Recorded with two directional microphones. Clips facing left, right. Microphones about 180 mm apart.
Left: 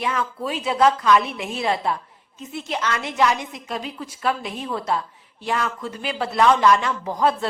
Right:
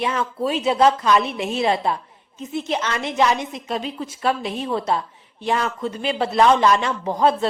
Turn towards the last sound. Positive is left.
turn(degrees=-25)  # may be behind; listen again after turning